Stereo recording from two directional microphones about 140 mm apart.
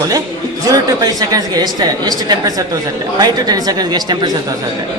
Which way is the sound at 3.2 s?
30° right (ahead or behind).